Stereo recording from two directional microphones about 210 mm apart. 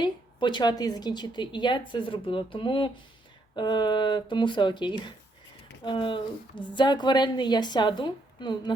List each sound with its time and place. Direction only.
0.0 s a woman's voice: 20° left (ahead or behind)